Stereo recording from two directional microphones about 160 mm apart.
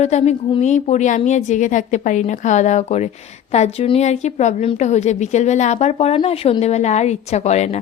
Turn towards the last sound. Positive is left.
turn(degrees=45)  # may be behind; listen again after turning